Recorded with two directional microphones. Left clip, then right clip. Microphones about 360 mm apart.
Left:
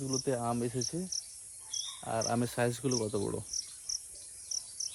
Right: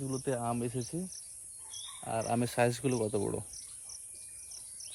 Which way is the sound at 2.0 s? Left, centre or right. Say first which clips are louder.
Right 1 dB; centre.